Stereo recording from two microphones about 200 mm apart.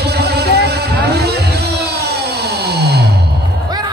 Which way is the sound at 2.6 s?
50° right (ahead or behind).